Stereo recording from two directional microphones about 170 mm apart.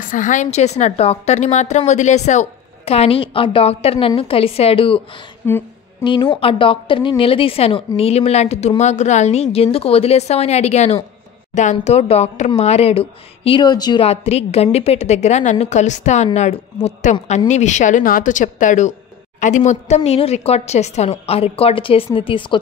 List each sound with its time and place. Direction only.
0.0 s a woman's voice: 50° left (ahead or behind); by 14.0 s 25° left (ahead or behind)
14.0 s a woman's voice: 35° left (ahead or behind)